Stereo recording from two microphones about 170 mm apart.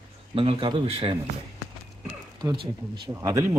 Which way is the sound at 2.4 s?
25° right (ahead or behind).